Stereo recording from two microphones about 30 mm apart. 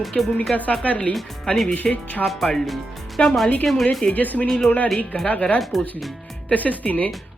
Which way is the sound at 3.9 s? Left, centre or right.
Left.